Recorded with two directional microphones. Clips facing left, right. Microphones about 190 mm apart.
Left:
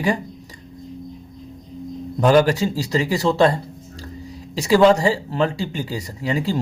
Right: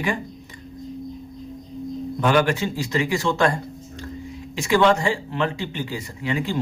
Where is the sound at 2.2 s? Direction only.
35° left (ahead or behind).